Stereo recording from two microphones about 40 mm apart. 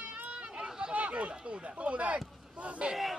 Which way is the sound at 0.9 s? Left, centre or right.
Right.